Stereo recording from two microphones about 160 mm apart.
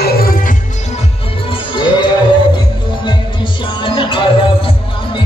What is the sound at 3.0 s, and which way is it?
Music, 30° left (ahead or behind).